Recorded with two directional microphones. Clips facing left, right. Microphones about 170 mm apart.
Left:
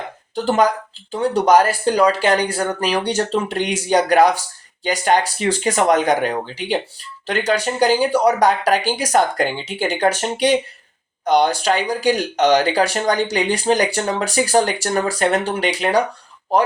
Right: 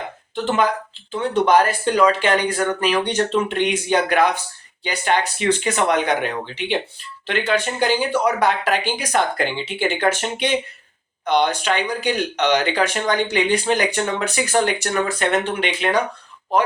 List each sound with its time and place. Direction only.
0.3 s speech: 40° left (ahead or behind)